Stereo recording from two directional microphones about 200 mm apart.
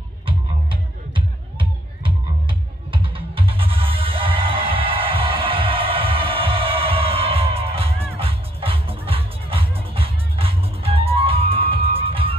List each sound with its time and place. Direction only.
0.3 s music: 25° right (ahead or behind)